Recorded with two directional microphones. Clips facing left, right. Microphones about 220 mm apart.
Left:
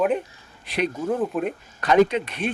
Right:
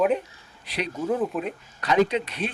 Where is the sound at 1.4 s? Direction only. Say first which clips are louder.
Left 4 dB; 50° left (ahead or behind).